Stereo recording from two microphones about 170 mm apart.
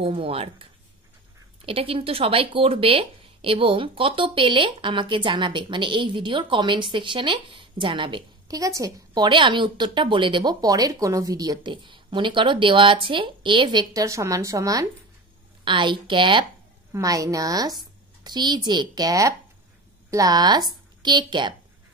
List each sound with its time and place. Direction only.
0.0 s speech: 35° right (ahead or behind)
1.7 s a woman's voice: 30° right (ahead or behind)